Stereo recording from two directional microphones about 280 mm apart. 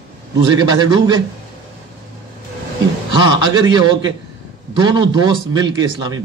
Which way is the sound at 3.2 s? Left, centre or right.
Centre.